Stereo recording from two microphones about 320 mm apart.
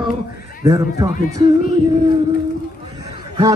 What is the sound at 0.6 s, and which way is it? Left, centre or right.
Speech, centre.